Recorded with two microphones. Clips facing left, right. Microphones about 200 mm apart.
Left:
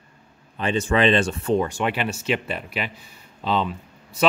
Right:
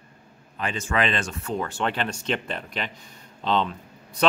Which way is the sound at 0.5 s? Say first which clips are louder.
Left 5 dB; 30° left (ahead or behind).